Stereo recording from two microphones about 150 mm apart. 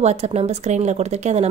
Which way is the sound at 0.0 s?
45° right (ahead or behind).